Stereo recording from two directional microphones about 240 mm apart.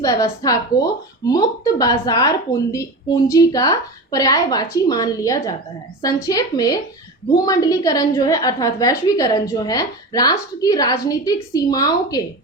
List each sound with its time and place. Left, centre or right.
0.0 s a woman's voice: centre